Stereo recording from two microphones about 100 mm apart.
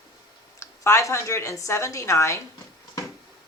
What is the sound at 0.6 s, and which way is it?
A woman's voice, 30° left (ahead or behind).